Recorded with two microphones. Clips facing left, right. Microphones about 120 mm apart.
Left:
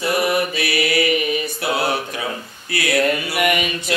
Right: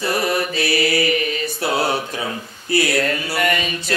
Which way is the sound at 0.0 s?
20° left (ahead or behind).